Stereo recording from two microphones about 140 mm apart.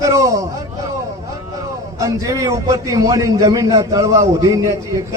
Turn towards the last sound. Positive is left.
turn(degrees=-25)  # may be behind; listen again after turning